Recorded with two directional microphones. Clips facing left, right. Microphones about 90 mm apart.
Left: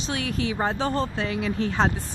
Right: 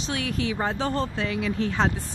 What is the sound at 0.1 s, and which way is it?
Speech, 30° left (ahead or behind).